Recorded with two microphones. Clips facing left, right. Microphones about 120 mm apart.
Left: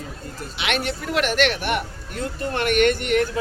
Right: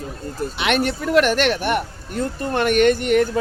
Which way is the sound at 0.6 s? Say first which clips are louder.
Right 5 dB; 45° right (ahead or behind).